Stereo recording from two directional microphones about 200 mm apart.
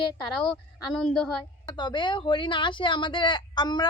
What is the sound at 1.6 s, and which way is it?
Speech, 20° left (ahead or behind).